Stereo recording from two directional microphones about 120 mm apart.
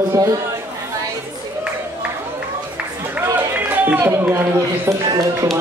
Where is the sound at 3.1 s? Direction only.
15° right (ahead or behind).